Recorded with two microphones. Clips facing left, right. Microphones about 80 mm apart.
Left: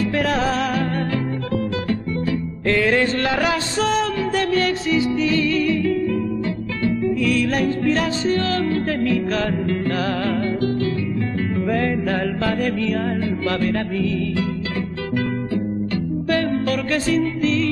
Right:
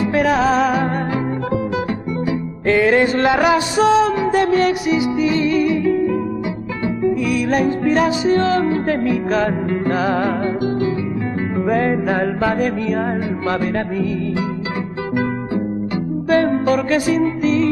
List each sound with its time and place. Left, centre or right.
0.0 s music: centre
2.6 s music: right
16.3 s music: right